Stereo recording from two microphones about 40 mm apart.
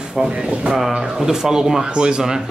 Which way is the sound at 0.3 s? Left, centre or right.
Right.